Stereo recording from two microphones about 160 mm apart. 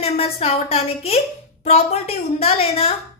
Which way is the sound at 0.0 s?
40° left (ahead or behind).